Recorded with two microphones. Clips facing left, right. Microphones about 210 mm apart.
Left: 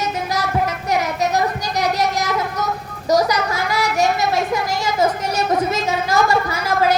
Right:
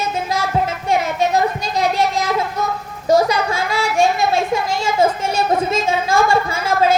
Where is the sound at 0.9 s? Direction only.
25° right (ahead or behind).